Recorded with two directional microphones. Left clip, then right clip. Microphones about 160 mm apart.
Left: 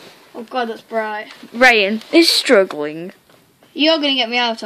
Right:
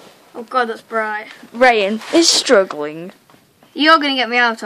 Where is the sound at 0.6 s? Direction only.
10° right (ahead or behind).